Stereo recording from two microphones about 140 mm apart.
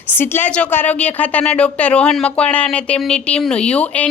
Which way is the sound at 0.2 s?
15° left (ahead or behind).